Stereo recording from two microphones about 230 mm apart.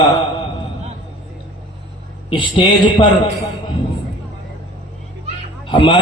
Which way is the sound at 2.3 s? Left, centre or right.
Left.